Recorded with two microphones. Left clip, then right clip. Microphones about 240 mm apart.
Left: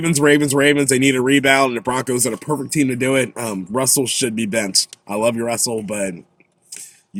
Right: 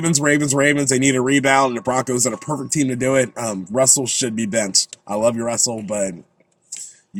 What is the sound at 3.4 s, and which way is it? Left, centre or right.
Speech, centre.